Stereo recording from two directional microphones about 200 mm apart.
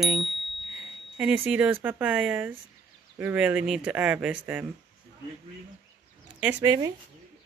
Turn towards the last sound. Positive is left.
turn(degrees=-15)  # may be behind; listen again after turning